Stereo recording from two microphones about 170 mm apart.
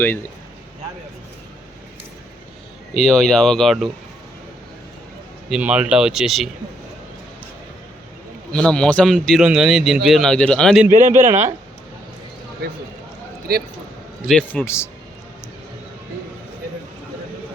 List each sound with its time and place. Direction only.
0.0 s a man's voice: 10° left (ahead or behind)
2.9 s a man's voice: 5° left (ahead or behind)
5.5 s a man's voice: 5° right (ahead or behind)
8.5 s a man's voice: 5° left (ahead or behind)
11.0 s speech: 15° right (ahead or behind)
13.5 s a man's voice: 65° right (ahead or behind)
14.3 s a man's voice: 5° left (ahead or behind)